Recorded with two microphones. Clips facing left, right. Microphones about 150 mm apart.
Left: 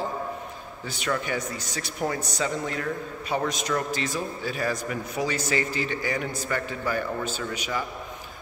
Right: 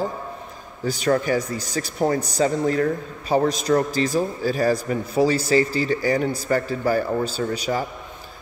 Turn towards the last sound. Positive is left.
turn(degrees=-35)  # may be behind; listen again after turning